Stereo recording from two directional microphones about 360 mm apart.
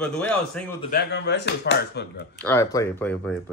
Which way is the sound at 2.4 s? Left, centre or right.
Centre.